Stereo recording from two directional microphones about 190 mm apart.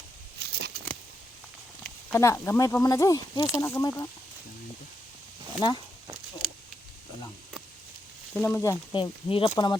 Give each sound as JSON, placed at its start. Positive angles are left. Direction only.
{"t": 0.3, "sound": "a sound", "side_deg": -60}
{"t": 2.1, "sound": "speech", "side_deg": 15}
{"t": 5.6, "sound": "speech", "side_deg": 20}
{"t": 8.3, "sound": "speech", "side_deg": 5}